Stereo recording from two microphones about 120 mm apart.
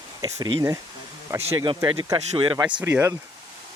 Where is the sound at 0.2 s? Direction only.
30° right (ahead or behind).